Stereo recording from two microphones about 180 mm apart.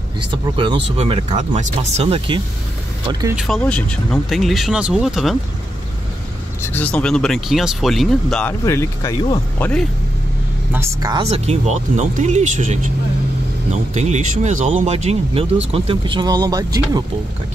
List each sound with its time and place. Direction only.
0.2 s speech: 25° right (ahead or behind)
3.3 s speech: centre (ahead or behind)
6.6 s speech: 10° left (ahead or behind)
10.7 s speech: 20° right (ahead or behind)
11.2 s speech: 35° right (ahead or behind)
13.9 s speech: 40° right (ahead or behind); by 16.8 s 20° right (ahead or behind)